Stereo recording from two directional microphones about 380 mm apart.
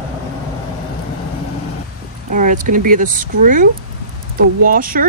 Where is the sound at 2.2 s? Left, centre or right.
Centre.